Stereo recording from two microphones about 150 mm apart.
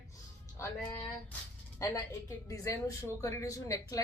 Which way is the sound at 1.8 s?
20° left (ahead or behind).